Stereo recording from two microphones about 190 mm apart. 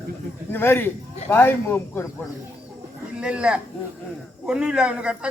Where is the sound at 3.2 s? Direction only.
5° right (ahead or behind).